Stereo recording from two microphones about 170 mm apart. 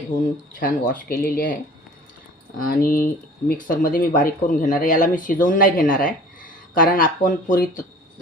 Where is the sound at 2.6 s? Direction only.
55° left (ahead or behind).